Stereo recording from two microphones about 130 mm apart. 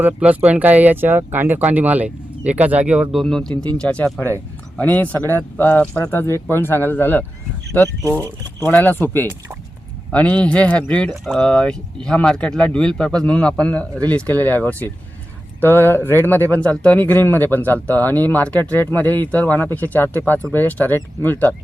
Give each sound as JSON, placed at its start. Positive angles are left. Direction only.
{"t": 0.0, "sound": "speech", "side_deg": -10}